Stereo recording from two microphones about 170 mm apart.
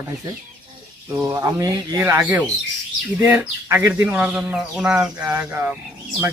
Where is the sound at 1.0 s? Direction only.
10° right (ahead or behind).